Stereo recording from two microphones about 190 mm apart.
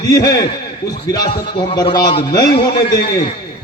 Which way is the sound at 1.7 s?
20° left (ahead or behind).